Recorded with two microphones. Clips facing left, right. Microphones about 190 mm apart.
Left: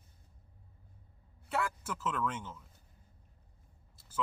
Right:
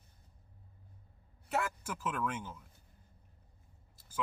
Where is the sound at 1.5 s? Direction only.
15° right (ahead or behind).